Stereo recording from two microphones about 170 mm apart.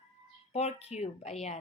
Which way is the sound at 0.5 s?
40° left (ahead or behind).